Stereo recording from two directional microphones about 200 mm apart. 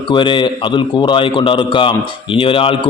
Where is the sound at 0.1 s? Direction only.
25° left (ahead or behind).